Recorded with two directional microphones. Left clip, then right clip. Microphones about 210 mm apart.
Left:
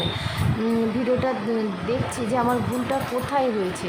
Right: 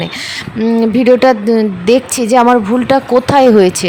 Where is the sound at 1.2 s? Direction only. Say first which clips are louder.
Right 15 dB; 45° right (ahead or behind).